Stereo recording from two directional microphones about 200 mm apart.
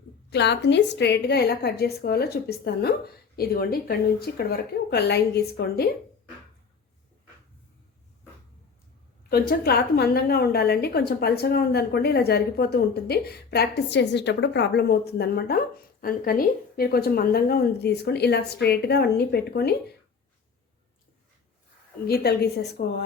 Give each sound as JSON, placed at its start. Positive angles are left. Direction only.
{"t": 0.3, "sound": "a woman's voice", "side_deg": 60}
{"t": 9.3, "sound": "a woman's voice", "side_deg": 50}
{"t": 22.0, "sound": "a woman's voice", "side_deg": 50}